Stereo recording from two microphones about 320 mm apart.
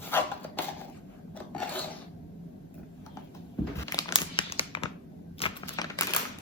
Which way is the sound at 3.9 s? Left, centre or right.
Centre.